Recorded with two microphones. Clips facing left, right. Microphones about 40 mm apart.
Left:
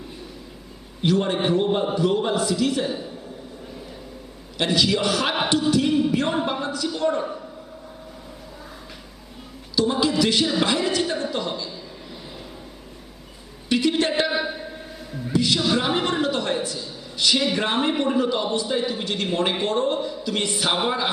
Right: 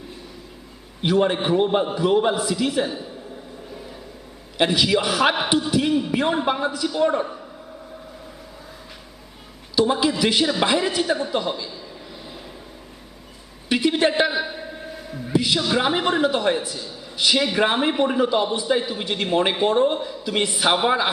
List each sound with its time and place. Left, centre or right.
1.0 s a man's voice: centre
4.5 s a man's voice: centre
9.7 s a man's voice: centre
13.7 s a sound: centre
14.2 s a sound: centre
15.7 s a man's voice: centre